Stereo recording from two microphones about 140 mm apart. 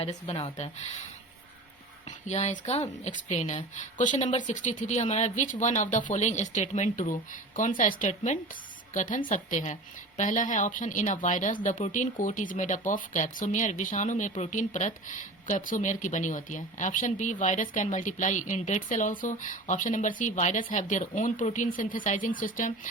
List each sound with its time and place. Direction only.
0.0 s speech: 45° left (ahead or behind)
2.0 s a woman's voice: 55° left (ahead or behind)